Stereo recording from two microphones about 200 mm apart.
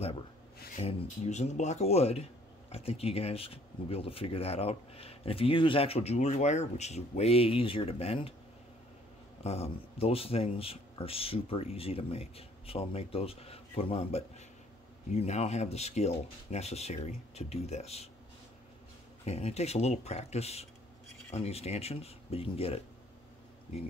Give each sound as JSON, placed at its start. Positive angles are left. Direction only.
{"t": 0.7, "sound": "speech", "side_deg": 35}
{"t": 9.4, "sound": "speech", "side_deg": 30}
{"t": 19.2, "sound": "speech", "side_deg": 30}